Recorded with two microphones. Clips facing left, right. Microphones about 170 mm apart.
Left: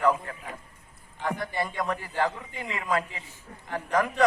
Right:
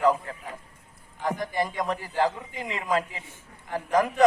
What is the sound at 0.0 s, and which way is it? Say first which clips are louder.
Speech: right 2 dB; 15° right (ahead or behind).